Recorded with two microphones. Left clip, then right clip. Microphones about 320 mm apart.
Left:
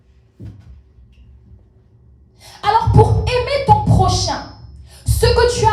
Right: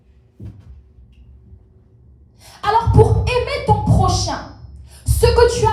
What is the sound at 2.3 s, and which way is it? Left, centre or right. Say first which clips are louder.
Music: left 1 dB; left.